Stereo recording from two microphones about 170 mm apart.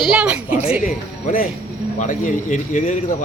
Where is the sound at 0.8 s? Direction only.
55° left (ahead or behind).